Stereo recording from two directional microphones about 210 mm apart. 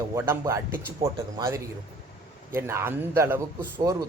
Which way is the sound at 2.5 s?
10° right (ahead or behind).